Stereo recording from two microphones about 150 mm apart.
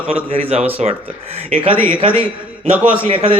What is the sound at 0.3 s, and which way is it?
A man's voice, 40° right (ahead or behind).